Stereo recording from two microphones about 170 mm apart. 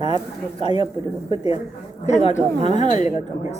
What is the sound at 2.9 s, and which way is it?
Speech, 45° left (ahead or behind).